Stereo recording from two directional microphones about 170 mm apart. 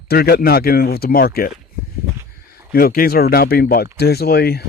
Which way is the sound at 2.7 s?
60° left (ahead or behind).